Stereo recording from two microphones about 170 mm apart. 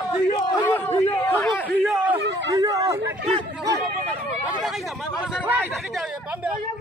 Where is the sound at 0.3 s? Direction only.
25° left (ahead or behind).